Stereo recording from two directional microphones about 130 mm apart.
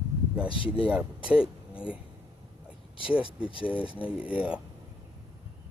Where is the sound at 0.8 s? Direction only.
10° right (ahead or behind).